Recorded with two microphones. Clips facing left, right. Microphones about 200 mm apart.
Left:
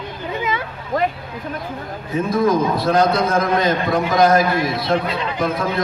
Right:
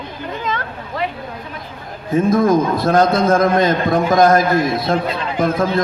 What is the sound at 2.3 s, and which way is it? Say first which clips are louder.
A man's voice: right 2 dB; 50° right (ahead or behind).